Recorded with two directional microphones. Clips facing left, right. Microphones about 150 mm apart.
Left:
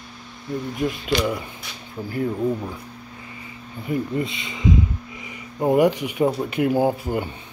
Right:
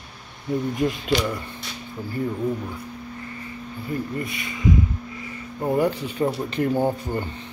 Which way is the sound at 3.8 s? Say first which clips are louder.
Left 4 dB; 20° left (ahead or behind).